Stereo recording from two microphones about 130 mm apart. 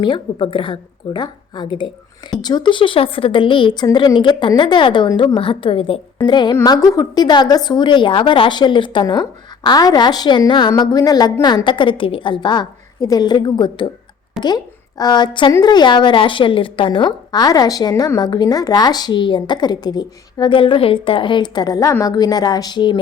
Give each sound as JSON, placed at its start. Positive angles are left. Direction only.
{"t": 0.0, "sound": "a woman's voice", "side_deg": 40}